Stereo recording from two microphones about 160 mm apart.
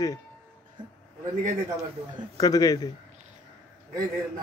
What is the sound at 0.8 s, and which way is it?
Speech, 30° right (ahead or behind).